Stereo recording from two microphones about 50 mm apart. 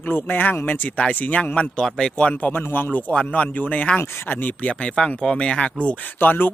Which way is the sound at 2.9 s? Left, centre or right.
Left.